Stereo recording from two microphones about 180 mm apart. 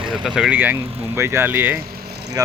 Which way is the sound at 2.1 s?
65° right (ahead or behind).